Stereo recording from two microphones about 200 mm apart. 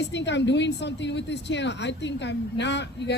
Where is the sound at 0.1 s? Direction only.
60° left (ahead or behind).